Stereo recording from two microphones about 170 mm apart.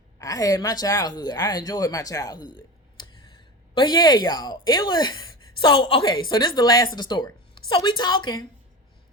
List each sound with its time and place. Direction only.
0.2 s speech: 20° left (ahead or behind)
3.8 s speech: 25° left (ahead or behind)